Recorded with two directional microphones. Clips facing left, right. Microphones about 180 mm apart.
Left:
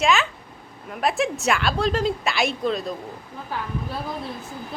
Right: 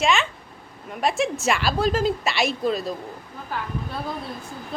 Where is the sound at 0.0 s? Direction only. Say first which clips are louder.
Left 1 dB; centre (ahead or behind).